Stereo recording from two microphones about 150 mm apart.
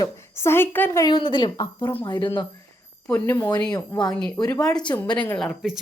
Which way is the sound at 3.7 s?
25° left (ahead or behind).